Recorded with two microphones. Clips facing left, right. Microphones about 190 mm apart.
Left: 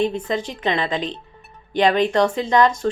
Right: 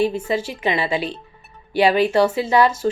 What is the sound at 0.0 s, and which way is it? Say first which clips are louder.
A woman's voice: right 1 dB; 10° right (ahead or behind).